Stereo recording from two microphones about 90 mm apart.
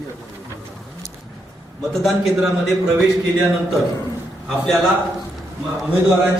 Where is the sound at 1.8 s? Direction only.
Centre (ahead or behind).